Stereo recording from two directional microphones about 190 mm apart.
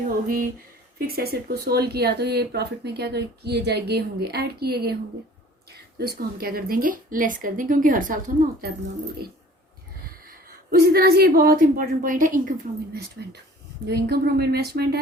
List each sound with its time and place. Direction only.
0.9 s a woman's voice: 55° right (ahead or behind)
10.0 s a woman's voice: 50° right (ahead or behind)